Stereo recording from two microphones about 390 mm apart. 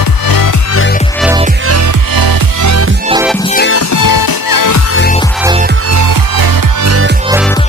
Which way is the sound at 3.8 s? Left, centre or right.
Left.